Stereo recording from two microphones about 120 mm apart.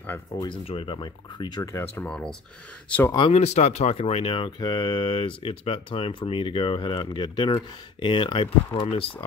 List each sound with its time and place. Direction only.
0.3 s speech: 25° left (ahead or behind)
0.7 s speech: 50° left (ahead or behind); by 2.0 s 25° left (ahead or behind)
2.0 s speech: 5° left (ahead or behind)
3.2 s speech: 60° left (ahead or behind)